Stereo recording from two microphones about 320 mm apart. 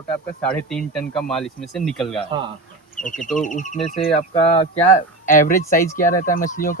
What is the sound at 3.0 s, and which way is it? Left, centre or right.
Speech, left.